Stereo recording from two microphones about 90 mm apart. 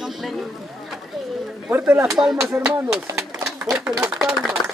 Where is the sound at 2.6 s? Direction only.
25° right (ahead or behind).